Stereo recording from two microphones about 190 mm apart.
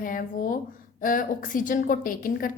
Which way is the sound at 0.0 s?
45° left (ahead or behind).